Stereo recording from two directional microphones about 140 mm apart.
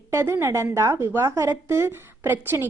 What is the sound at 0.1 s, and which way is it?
A woman's voice, 20° right (ahead or behind).